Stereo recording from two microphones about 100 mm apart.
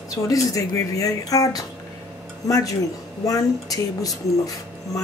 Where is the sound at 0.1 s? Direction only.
35° left (ahead or behind).